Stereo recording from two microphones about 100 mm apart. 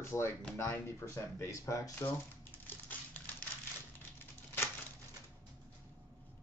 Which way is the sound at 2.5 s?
15° left (ahead or behind).